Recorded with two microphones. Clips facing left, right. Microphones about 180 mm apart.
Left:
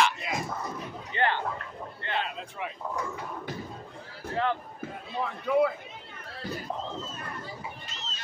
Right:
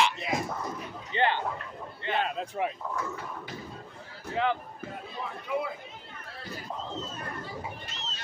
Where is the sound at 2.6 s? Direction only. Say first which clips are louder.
Right 6 dB; 45° right (ahead or behind).